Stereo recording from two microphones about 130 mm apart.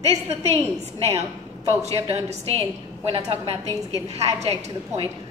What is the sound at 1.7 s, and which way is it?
A woman's voice, 50° right (ahead or behind).